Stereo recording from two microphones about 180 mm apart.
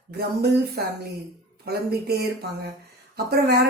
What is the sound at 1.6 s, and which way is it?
A woman's voice, 60° right (ahead or behind).